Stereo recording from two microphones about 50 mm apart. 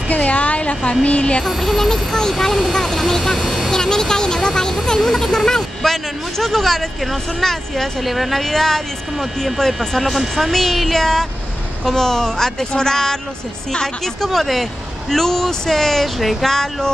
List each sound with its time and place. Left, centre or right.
0.1 s a woman's voice: left
1.4 s speech: centre
3.7 s speech: centre